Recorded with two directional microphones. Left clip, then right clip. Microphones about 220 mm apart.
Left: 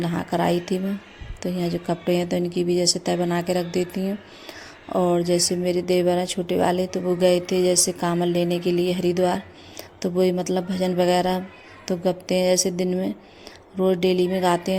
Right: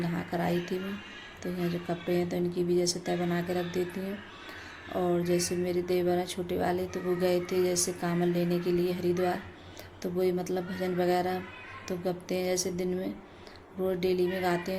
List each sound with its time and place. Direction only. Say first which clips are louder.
0.0 s speech: left 9 dB; 40° left (ahead or behind)